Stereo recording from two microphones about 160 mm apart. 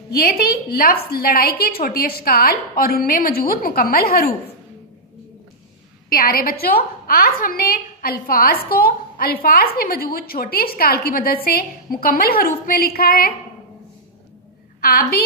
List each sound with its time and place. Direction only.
0.1 s a woman's voice: 70° left (ahead or behind)
6.0 s a woman's voice: 65° left (ahead or behind)
14.8 s a woman's voice: 65° left (ahead or behind)